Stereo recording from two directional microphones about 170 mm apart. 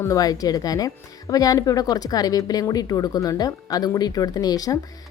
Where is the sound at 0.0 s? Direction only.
20° left (ahead or behind).